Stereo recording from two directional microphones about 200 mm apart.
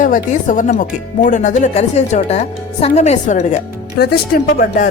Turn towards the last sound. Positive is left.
turn(degrees=45)  # may be behind; listen again after turning